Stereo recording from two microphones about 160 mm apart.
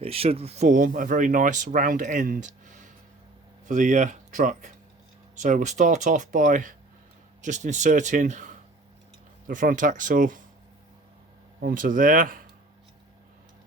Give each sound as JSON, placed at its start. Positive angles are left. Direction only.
{"t": 0.0, "sound": "speech", "side_deg": -35}
{"t": 11.6, "sound": "speech", "side_deg": -55}